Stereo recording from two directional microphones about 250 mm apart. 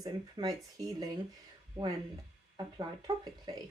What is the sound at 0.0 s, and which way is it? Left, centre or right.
Speech, centre.